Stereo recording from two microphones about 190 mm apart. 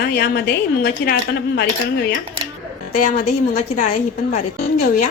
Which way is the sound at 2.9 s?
40° left (ahead or behind).